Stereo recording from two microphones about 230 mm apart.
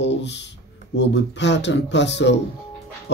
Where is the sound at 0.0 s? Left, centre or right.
Left.